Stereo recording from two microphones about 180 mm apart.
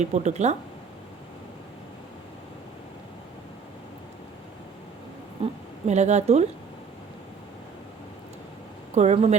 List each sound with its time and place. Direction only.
0.0 s speech: 40° right (ahead or behind)
5.4 s a sound: 40° right (ahead or behind)
9.0 s speech: 40° right (ahead or behind)